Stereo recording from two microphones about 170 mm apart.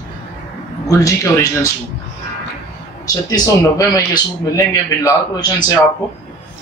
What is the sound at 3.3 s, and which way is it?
A man's voice, 20° left (ahead or behind).